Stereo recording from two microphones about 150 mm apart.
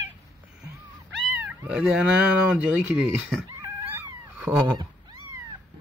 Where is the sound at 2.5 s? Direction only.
5° right (ahead or behind).